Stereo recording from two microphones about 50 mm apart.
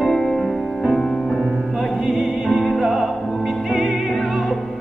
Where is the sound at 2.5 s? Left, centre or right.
Centre.